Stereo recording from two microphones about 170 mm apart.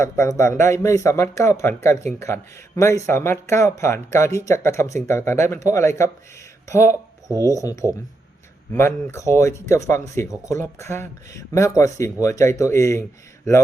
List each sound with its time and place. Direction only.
0.0 s speech: 15° left (ahead or behind)